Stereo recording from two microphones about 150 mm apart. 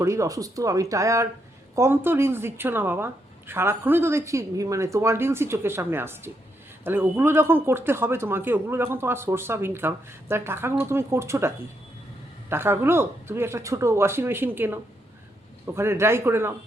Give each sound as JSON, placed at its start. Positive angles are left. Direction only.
{"t": 0.0, "sound": "speech", "side_deg": -20}